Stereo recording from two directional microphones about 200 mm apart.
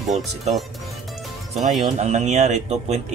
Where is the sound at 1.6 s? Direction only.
35° right (ahead or behind).